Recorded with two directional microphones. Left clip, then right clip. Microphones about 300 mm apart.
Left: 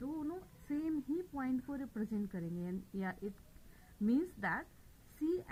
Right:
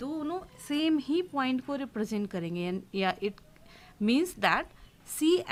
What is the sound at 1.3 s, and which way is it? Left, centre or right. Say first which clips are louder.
A woman's voice: right 10 dB; right.